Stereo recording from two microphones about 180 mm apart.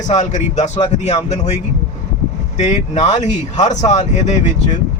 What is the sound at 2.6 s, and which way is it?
Speech, 40° left (ahead or behind).